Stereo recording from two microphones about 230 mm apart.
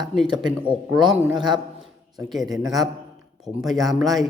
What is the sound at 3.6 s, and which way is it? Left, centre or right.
Speech, centre.